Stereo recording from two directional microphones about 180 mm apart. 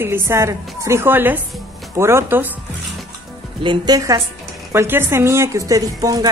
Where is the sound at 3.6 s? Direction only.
25° right (ahead or behind).